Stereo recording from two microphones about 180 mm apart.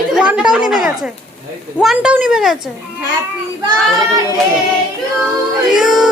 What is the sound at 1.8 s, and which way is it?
Speech, 5° right (ahead or behind).